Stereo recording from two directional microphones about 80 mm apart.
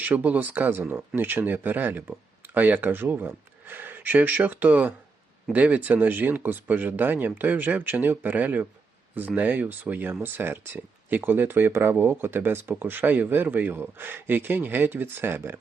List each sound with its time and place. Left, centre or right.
0.0 s speech: centre